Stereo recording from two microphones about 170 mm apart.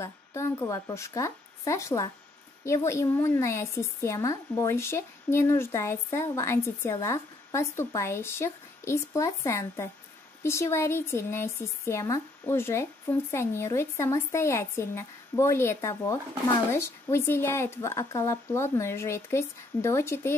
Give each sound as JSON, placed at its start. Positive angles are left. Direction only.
{"t": 0.0, "sound": "a woman's voice", "side_deg": 15}